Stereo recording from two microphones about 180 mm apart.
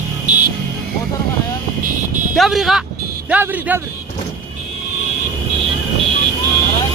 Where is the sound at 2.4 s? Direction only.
Centre (ahead or behind).